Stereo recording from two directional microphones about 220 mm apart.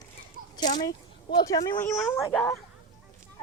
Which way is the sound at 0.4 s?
40° right (ahead or behind).